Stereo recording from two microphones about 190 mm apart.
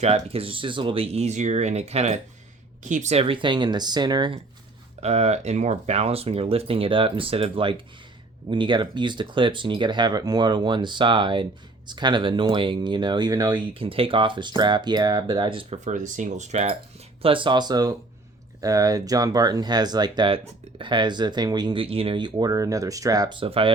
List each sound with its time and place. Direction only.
0.0 s speech: 30° right (ahead or behind)
4.9 s speech: 35° right (ahead or behind)
17.2 s speech: 25° right (ahead or behind)